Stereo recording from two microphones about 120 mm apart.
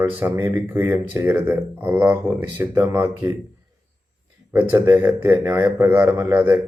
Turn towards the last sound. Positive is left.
turn(degrees=-20)  # may be behind; listen again after turning